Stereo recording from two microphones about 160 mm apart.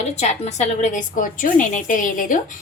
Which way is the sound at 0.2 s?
45° left (ahead or behind).